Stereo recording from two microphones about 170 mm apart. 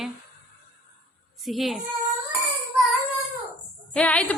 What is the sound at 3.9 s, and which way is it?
Speech, 5° left (ahead or behind).